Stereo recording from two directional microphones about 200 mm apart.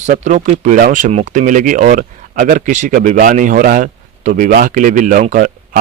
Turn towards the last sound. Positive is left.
turn(degrees=-45)  # may be behind; listen again after turning